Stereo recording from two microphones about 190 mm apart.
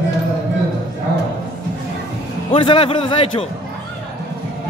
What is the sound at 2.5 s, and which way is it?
Speech, 30° left (ahead or behind).